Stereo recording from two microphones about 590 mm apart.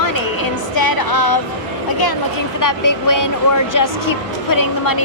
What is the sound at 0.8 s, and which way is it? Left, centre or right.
Speech, left.